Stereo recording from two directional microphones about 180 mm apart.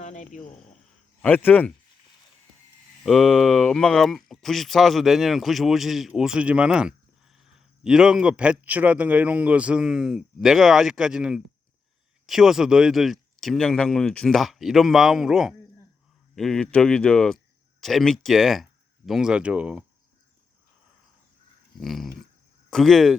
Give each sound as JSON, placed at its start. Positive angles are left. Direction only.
{"t": 0.0, "sound": "cricket", "side_deg": 40}
{"t": 0.9, "sound": "a sound", "side_deg": 10}
{"t": 3.0, "sound": "speech", "side_deg": 0}
{"t": 21.8, "sound": "speech", "side_deg": 0}